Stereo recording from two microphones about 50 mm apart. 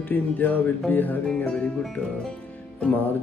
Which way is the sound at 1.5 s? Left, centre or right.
Centre.